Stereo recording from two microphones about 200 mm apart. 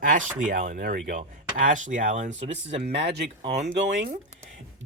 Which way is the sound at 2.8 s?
55° right (ahead or behind).